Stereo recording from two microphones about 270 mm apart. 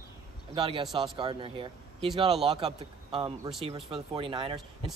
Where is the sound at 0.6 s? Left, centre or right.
Centre.